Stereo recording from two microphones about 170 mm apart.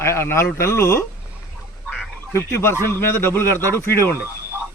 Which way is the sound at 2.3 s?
15° left (ahead or behind).